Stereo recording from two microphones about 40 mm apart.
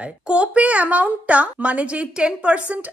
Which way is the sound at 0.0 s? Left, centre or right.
Right.